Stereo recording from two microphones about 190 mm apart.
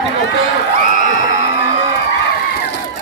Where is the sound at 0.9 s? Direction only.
45° right (ahead or behind).